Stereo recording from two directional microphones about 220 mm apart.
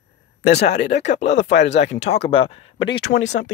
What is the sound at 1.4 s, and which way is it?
Speech, 55° left (ahead or behind).